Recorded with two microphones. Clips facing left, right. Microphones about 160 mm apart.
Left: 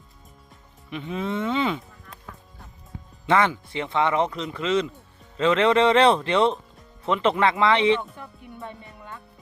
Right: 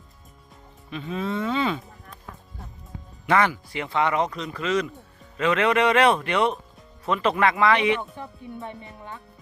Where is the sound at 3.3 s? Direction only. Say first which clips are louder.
Even; 20° left (ahead or behind).